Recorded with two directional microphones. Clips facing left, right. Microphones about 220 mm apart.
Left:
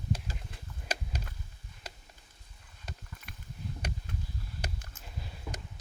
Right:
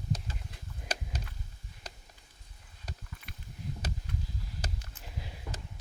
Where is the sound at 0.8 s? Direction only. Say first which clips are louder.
Left 1 dB; 10° left (ahead or behind).